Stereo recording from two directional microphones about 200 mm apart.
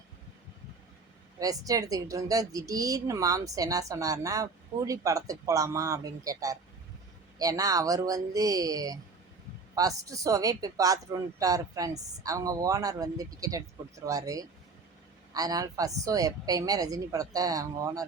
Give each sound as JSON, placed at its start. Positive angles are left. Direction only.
{"t": 1.4, "sound": "a woman's voice", "side_deg": -15}